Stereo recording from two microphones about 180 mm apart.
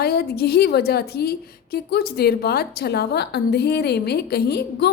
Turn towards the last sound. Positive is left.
turn(degrees=60)  # may be behind; listen again after turning